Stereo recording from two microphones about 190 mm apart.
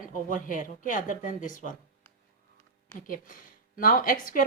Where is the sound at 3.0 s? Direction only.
45° left (ahead or behind).